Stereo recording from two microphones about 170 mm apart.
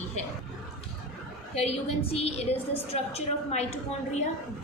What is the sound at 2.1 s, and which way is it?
A woman's voice, 35° left (ahead or behind).